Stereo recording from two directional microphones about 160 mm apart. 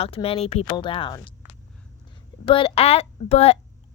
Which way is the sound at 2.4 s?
35° left (ahead or behind).